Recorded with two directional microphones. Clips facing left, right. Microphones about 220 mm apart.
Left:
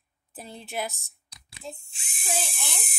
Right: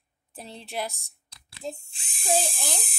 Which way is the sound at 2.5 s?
35° right (ahead or behind).